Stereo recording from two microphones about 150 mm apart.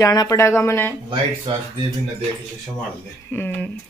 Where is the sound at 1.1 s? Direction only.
35° right (ahead or behind).